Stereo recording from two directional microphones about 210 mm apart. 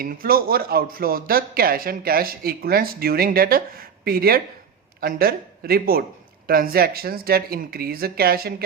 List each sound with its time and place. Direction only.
0.0 s speech: 45° right (ahead or behind)